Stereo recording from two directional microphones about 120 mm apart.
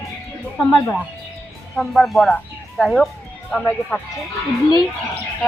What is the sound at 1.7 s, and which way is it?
Speech, centre (ahead or behind).